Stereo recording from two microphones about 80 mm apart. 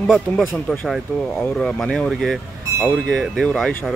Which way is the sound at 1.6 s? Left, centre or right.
Centre.